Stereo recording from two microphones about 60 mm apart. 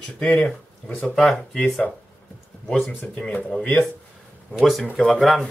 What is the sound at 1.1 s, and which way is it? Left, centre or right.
Speech, centre.